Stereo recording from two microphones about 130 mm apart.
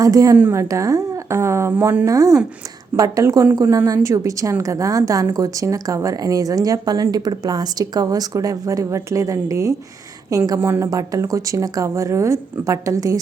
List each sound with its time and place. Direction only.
0.0 s a woman's voice: 25° right (ahead or behind)
0.3 s a woman's voice: 15° right (ahead or behind)
0.6 s a woman's voice: 25° right (ahead or behind)